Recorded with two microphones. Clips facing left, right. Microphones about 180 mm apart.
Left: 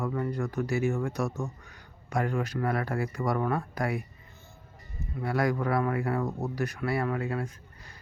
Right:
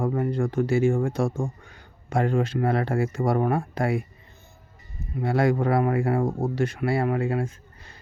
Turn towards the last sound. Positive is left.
turn(degrees=-25)  # may be behind; listen again after turning